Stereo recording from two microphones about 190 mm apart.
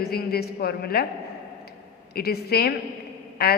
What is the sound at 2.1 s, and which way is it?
A woman's voice, 55° left (ahead or behind).